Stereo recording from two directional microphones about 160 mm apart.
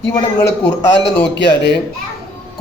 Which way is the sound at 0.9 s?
90° left.